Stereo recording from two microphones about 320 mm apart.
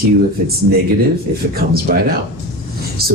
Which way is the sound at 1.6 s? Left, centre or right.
Right.